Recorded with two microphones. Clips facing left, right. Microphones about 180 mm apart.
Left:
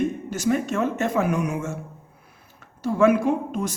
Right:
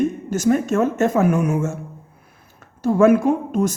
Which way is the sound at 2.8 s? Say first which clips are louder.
Right 4 dB; 45° right (ahead or behind).